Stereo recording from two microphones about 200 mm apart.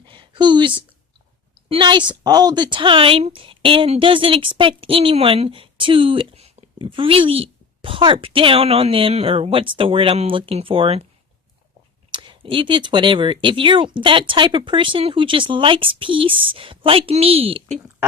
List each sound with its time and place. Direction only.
0.0 s a sound: 25° right (ahead or behind)
1.7 s speech: 25° right (ahead or behind)
12.1 s speech: 25° right (ahead or behind)